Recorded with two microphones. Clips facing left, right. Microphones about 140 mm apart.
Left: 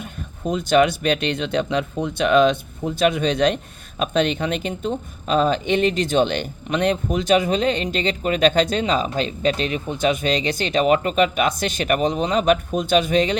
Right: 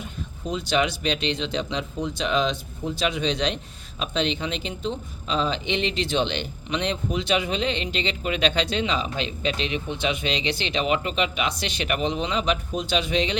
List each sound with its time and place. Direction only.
0.0 s speech: 50° left (ahead or behind)